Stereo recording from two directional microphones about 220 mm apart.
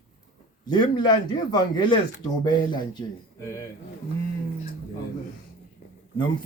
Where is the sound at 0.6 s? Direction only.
20° left (ahead or behind).